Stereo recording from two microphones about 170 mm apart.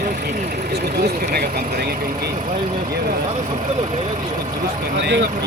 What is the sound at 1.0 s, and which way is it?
Speech, 65° right (ahead or behind).